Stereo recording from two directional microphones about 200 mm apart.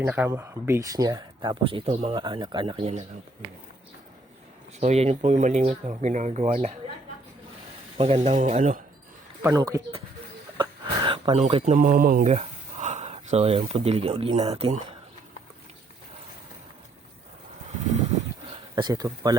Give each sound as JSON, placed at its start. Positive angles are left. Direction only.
{"t": 0.0, "sound": "speech", "side_deg": -10}
{"t": 4.8, "sound": "speech", "side_deg": -35}
{"t": 7.9, "sound": "speech", "side_deg": -30}
{"t": 9.4, "sound": "speech", "side_deg": -15}
{"t": 12.3, "sound": "a sound", "side_deg": -35}
{"t": 14.3, "sound": "speech", "side_deg": -30}
{"t": 18.8, "sound": "speech", "side_deg": -20}